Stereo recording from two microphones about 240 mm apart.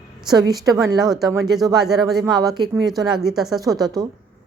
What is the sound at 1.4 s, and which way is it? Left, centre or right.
Speech, centre.